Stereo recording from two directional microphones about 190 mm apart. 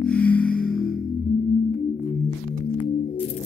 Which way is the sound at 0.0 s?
5° left (ahead or behind).